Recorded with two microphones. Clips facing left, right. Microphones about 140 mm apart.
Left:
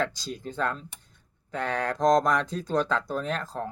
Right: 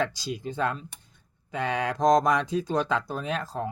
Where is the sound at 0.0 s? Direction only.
10° right (ahead or behind).